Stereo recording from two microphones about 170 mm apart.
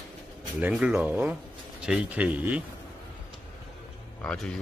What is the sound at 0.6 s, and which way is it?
Speech, 10° right (ahead or behind).